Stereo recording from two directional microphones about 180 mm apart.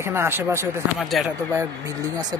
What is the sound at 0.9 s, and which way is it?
Speech, centre (ahead or behind).